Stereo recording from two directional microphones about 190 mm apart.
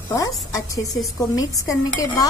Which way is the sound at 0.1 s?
15° left (ahead or behind).